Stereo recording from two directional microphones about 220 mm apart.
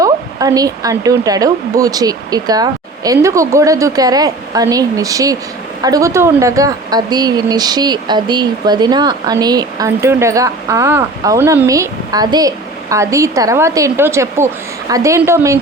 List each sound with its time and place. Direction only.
0.0 s speech: 15° right (ahead or behind)